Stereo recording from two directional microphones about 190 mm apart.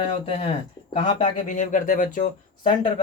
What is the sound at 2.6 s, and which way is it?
Speech, 30° left (ahead or behind).